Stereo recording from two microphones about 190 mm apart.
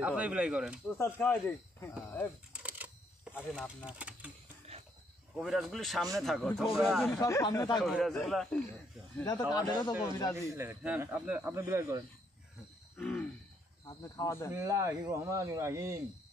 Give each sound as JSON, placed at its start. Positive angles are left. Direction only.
{"t": 0.0, "sound": "speech", "side_deg": -5}
{"t": 0.8, "sound": "speech", "side_deg": 10}
{"t": 2.6, "sound": "telephone", "side_deg": -10}
{"t": 3.5, "sound": "speech", "side_deg": -5}
{"t": 5.3, "sound": "speech", "side_deg": 0}
{"t": 7.2, "sound": "speech", "side_deg": 15}
{"t": 7.8, "sound": "speech", "side_deg": 0}
{"t": 9.5, "sound": "speech", "side_deg": 20}
{"t": 10.3, "sound": "speech", "side_deg": -15}
{"t": 12.9, "sound": "a sound", "side_deg": 5}
{"t": 13.8, "sound": "speech", "side_deg": 15}
{"t": 14.5, "sound": "speech", "side_deg": -15}